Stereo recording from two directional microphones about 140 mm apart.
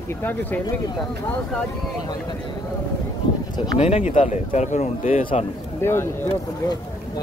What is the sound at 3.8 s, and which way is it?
Speech, 55° left (ahead or behind).